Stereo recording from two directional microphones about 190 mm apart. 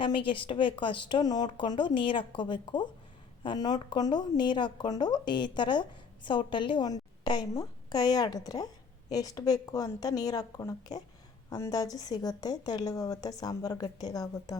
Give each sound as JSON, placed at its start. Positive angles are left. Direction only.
{"t": 0.0, "sound": "a woman's voice", "side_deg": 25}